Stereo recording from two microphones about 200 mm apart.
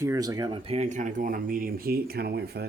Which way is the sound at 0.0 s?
15° right (ahead or behind).